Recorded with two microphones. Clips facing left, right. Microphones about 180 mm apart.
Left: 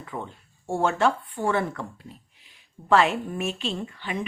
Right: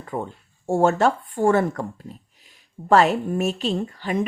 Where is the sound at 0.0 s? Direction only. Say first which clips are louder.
Right 6 dB; 45° right (ahead or behind).